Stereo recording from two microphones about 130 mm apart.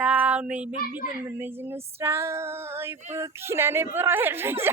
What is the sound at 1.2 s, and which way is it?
Female singing, 15° right (ahead or behind).